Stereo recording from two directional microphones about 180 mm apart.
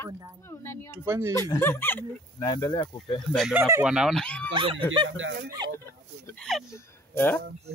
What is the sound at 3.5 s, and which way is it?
Speech, 15° right (ahead or behind).